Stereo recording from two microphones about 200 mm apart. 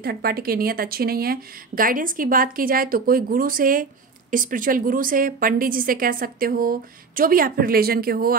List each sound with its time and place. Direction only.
0.0 s a woman's voice: 50° right (ahead or behind)